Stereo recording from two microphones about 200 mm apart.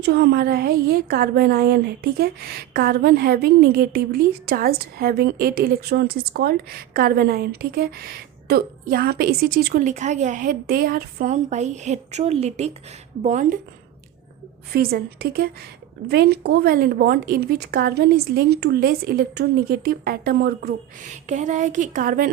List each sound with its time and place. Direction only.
0.0 s a woman's voice: 55° right (ahead or behind); by 13.6 s 40° right (ahead or behind)
14.7 s a woman's voice: 50° right (ahead or behind)